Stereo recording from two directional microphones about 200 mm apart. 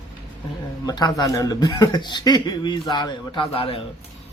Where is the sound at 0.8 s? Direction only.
20° left (ahead or behind).